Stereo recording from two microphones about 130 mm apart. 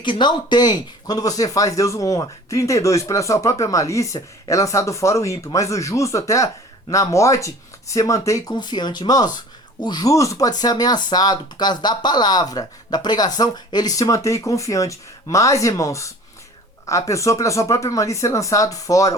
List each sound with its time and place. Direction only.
0.0 s speech: 35° left (ahead or behind)